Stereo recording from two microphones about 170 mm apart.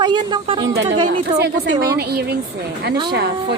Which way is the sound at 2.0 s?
70° right (ahead or behind).